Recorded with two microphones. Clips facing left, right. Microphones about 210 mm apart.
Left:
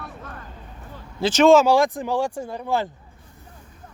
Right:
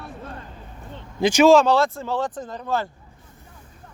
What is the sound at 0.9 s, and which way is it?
Vehicle, 15° right (ahead or behind).